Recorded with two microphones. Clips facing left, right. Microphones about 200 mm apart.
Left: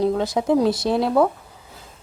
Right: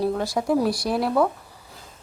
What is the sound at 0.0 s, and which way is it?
A woman's voice, 20° left (ahead or behind).